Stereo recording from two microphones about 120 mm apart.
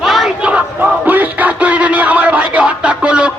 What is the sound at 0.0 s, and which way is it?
Crowd, centre (ahead or behind).